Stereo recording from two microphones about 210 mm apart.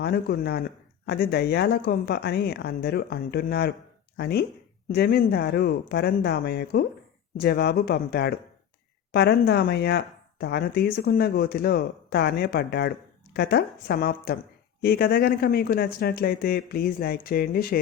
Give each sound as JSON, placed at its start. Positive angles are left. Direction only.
{"t": 0.0, "sound": "speech", "side_deg": 50}